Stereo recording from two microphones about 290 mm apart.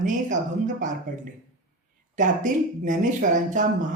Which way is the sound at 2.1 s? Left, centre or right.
Right.